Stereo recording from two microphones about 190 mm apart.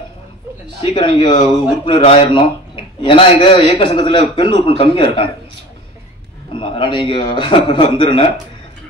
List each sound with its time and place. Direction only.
0.9 s speech: 25° left (ahead or behind)
6.5 s speech: 25° left (ahead or behind)